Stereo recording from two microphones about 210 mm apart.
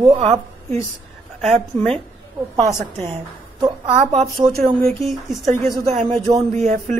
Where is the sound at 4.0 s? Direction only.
35° right (ahead or behind).